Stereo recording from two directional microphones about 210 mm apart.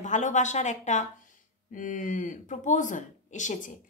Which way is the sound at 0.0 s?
35° left (ahead or behind).